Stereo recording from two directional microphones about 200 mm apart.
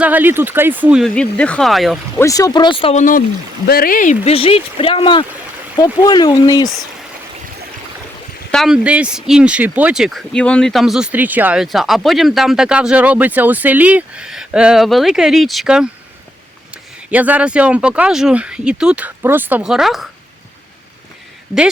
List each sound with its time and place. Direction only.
0.0 s speech: 10° right (ahead or behind)
2.1 s speech: 15° left (ahead or behind)
3.0 s speech: 40° left (ahead or behind); by 6.7 s 20° left (ahead or behind)
8.5 s speech: centre (ahead or behind)